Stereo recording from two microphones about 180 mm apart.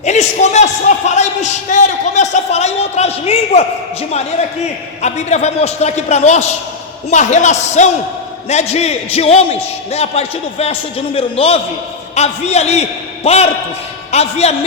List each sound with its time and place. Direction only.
0.0 s a man's voice: 40° left (ahead or behind)
5.0 s a man's voice: 40° left (ahead or behind)